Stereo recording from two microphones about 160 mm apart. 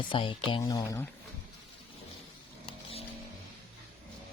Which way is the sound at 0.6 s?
20° left (ahead or behind).